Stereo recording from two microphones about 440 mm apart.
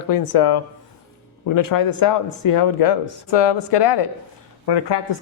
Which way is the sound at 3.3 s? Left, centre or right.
Left.